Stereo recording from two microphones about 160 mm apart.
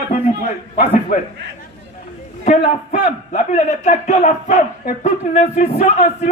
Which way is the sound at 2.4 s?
55° left (ahead or behind).